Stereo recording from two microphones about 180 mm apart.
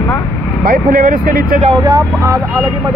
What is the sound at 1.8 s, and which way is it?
Speech, 20° right (ahead or behind).